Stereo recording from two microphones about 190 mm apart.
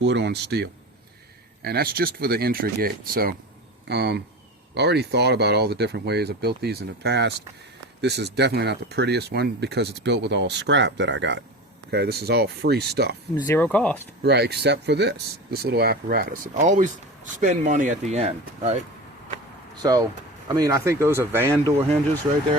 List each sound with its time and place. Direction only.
0.0 s speech: 65° right (ahead or behind)
3.8 s speech: 60° right (ahead or behind)
13.3 s speech: 20° left (ahead or behind)
13.6 s speech: 10° left (ahead or behind)
14.3 s speech: 60° right (ahead or behind); by 18.8 s 35° right (ahead or behind)
19.8 s speech: 20° right (ahead or behind)